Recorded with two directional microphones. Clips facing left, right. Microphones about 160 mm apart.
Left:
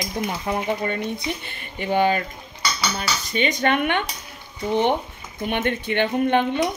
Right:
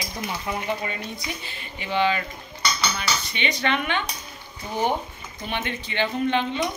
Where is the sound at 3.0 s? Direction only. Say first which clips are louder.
Left 4 dB; 40° left (ahead or behind).